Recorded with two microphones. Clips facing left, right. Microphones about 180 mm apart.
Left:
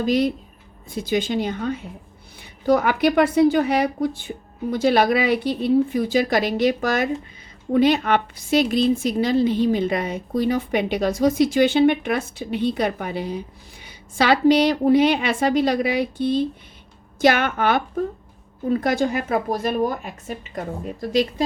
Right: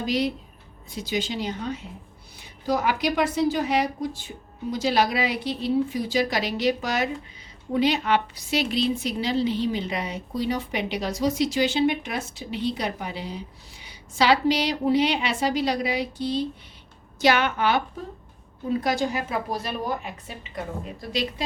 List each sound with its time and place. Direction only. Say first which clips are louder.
0.0 s a woman's voice: left 5 dB; 50° left (ahead or behind)